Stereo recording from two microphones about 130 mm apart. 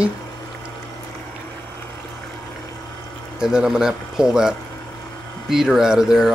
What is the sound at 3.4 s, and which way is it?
Speech, 5° right (ahead or behind).